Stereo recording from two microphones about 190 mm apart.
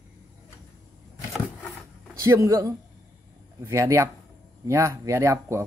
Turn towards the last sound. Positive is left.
turn(degrees=-15)  # may be behind; listen again after turning